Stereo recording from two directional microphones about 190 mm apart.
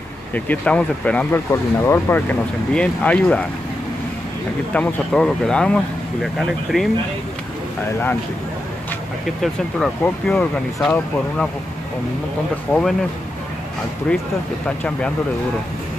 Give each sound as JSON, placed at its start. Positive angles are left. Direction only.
{"t": 0.3, "sound": "speech", "side_deg": 5}
{"t": 4.7, "sound": "speech", "side_deg": 5}
{"t": 9.4, "sound": "speech", "side_deg": 5}
{"t": 12.7, "sound": "speech", "side_deg": 5}